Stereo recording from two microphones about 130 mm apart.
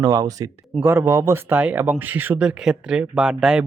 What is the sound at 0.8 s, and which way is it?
Speech, 15° right (ahead or behind).